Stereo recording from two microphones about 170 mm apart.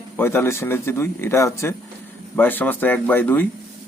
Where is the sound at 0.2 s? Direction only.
15° left (ahead or behind).